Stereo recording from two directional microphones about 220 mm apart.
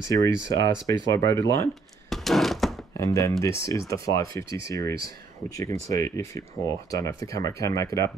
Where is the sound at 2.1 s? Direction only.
Centre (ahead or behind).